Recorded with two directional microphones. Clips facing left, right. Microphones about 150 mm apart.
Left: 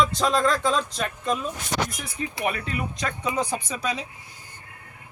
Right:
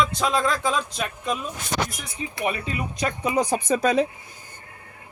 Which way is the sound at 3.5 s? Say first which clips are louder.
Right 8 dB; 50° right (ahead or behind).